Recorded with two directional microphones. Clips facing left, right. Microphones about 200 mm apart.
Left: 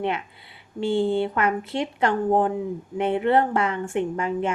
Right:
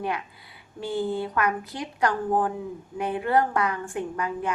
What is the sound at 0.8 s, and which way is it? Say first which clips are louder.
Speech: left 6 dB; 25° left (ahead or behind).